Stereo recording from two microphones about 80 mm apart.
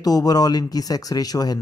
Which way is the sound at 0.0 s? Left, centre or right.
Left.